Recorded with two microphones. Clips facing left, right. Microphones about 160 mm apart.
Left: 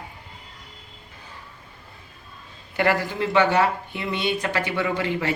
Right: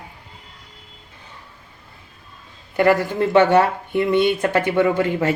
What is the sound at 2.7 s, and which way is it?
Speech, 50° right (ahead or behind).